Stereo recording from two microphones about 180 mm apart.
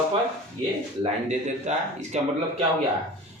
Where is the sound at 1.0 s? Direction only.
40° right (ahead or behind).